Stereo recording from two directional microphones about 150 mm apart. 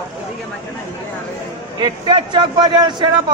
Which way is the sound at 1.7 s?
30° right (ahead or behind).